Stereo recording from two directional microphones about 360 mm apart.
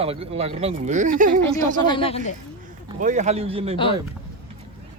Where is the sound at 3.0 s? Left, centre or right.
Centre.